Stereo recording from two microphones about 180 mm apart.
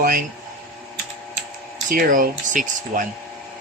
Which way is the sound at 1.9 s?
50° right (ahead or behind).